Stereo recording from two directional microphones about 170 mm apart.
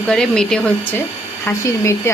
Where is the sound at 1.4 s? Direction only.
15° left (ahead or behind).